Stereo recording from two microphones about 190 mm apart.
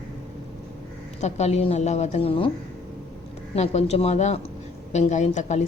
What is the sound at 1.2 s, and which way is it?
A woman's voice, 35° left (ahead or behind).